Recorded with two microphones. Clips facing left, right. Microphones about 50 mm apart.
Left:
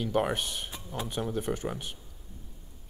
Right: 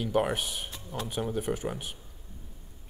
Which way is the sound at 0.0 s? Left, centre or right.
Centre.